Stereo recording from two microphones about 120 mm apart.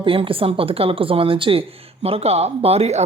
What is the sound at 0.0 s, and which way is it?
Speech, 50° right (ahead or behind).